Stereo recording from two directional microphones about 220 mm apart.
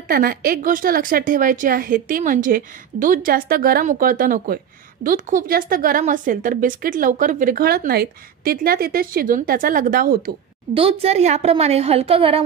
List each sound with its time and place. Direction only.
0.1 s a woman's voice: 40° right (ahead or behind)
10.7 s a woman's voice: 25° right (ahead or behind)